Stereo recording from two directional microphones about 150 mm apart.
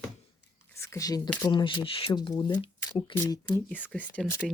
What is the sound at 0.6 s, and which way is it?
Speech, 20° left (ahead or behind).